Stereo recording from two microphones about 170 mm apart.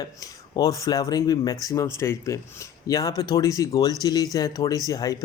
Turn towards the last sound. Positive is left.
turn(degrees=20)  # may be behind; listen again after turning